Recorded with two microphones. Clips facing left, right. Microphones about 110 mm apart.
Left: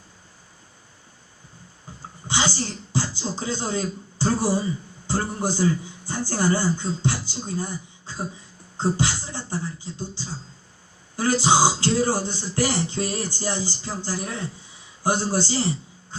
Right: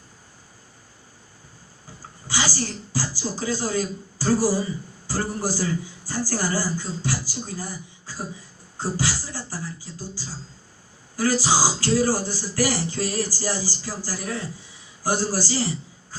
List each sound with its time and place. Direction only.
2.0 s a man's voice: 25° left (ahead or behind)